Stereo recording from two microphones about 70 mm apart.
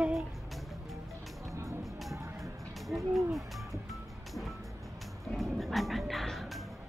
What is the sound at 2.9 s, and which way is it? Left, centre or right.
Speech, centre.